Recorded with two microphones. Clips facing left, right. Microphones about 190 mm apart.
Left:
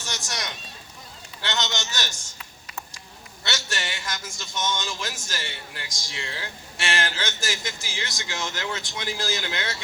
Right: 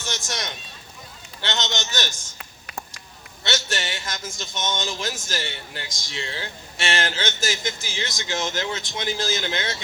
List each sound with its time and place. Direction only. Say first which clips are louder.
0.0 s run: right 3 dB; 25° right (ahead or behind)
1.4 s speech: right 1 dB; 20° right (ahead or behind)
3.4 s speech: right 4 dB; 20° right (ahead or behind)